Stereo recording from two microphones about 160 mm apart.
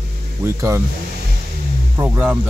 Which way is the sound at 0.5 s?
15° right (ahead or behind).